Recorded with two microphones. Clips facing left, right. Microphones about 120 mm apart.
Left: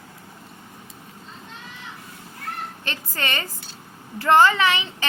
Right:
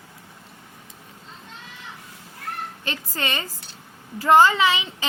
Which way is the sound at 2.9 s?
15° right (ahead or behind).